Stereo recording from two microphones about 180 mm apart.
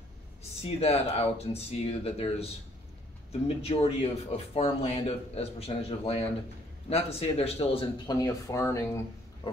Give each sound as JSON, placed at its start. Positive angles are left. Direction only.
{"t": 0.4, "sound": "a man's voice", "side_deg": 35}